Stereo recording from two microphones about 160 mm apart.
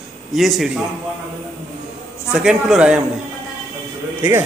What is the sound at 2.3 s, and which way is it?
Speech, 5° right (ahead or behind).